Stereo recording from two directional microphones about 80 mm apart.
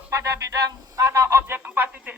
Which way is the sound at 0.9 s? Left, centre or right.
Right.